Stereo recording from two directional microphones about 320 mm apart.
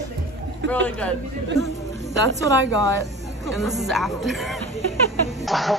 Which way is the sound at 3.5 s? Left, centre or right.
Centre.